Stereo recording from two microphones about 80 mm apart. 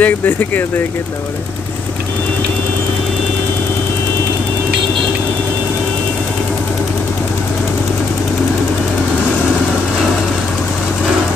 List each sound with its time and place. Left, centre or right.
0.0 s speech: left